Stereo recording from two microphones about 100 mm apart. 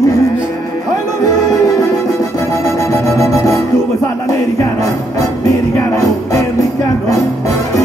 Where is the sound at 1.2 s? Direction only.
30° left (ahead or behind).